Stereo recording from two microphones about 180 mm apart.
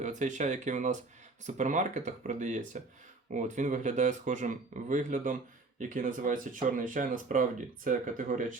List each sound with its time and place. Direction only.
0.0 s speech: 45° right (ahead or behind)